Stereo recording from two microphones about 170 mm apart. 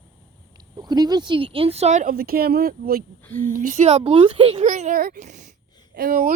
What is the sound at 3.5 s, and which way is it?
Speech, 50° right (ahead or behind).